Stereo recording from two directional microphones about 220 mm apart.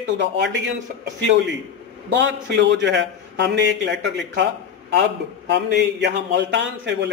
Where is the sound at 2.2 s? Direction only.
55° right (ahead or behind).